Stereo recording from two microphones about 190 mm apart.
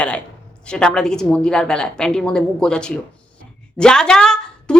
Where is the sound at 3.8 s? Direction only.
5° left (ahead or behind).